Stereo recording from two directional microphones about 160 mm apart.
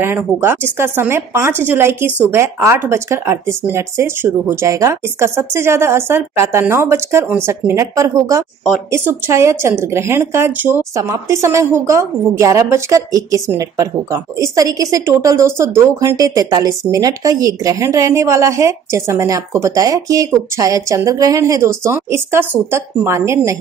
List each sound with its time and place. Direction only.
0.0 s a woman's voice: 15° right (ahead or behind)